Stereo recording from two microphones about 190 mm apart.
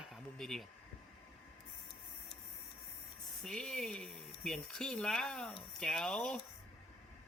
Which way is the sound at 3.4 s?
Centre (ahead or behind).